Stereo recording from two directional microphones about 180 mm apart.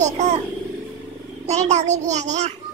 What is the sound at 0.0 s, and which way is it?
Vehicle, 40° right (ahead or behind).